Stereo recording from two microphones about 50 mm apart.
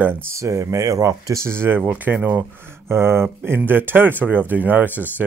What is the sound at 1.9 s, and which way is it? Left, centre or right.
Speech, right.